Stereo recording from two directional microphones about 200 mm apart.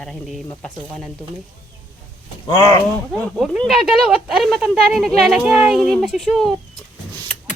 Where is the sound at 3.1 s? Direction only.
Centre (ahead or behind).